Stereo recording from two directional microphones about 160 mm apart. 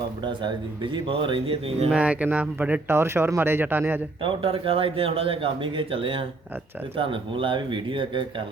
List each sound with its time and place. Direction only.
0.9 s speech: 30° right (ahead or behind)
1.9 s speech: 10° right (ahead or behind)
4.2 s speech: 35° right (ahead or behind)